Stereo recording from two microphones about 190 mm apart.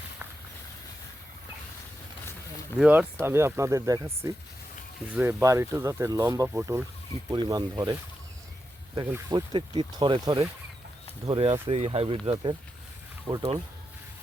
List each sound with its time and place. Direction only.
2.7 s speech: 5° right (ahead or behind); by 7.9 s 20° right (ahead or behind)
9.0 s speech: 20° right (ahead or behind)